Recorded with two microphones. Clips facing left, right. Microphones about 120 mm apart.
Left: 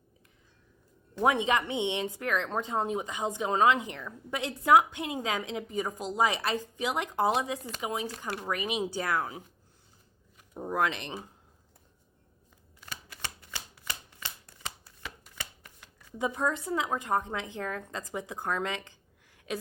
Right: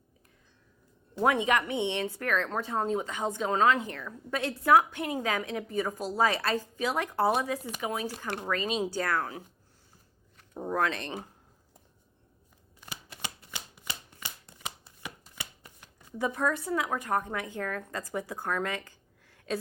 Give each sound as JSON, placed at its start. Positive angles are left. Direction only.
{"t": 1.2, "sound": "speech", "side_deg": 20}
{"t": 10.3, "sound": "a sound", "side_deg": 10}
{"t": 12.8, "sound": "shuffling cards", "side_deg": -15}
{"t": 16.1, "sound": "speech", "side_deg": 20}